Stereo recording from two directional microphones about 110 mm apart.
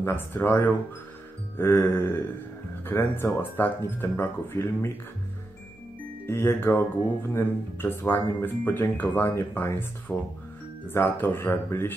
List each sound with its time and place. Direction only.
0.0 s speech: 20° left (ahead or behind)
6.2 s speech: 20° left (ahead or behind)